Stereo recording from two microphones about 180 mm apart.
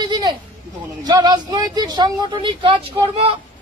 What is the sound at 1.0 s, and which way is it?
A woman's voice, 20° right (ahead or behind).